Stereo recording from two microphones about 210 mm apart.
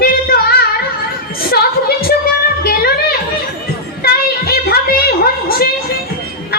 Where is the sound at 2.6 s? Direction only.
45° left (ahead or behind).